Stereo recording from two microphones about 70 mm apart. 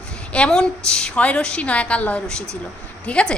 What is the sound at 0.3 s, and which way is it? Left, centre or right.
A woman's voice, centre.